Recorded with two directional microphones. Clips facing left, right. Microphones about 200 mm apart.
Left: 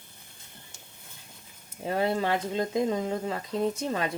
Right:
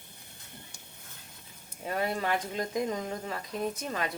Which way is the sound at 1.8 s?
25° left (ahead or behind).